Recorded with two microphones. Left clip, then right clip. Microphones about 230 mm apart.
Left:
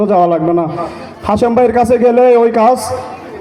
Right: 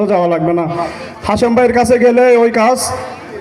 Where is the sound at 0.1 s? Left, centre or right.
Left.